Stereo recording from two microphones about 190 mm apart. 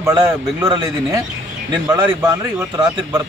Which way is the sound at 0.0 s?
20° right (ahead or behind).